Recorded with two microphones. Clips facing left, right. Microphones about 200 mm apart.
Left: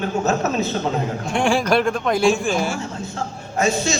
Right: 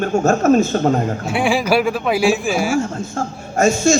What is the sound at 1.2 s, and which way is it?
Speech, 5° right (ahead or behind).